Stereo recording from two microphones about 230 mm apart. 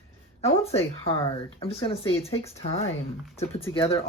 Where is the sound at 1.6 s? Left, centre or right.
Left.